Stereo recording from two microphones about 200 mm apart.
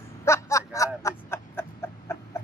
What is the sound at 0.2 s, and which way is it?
Chicken, 15° left (ahead or behind).